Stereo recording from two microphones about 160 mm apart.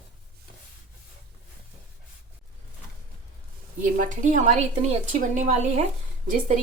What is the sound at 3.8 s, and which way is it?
A woman's voice, 50° right (ahead or behind).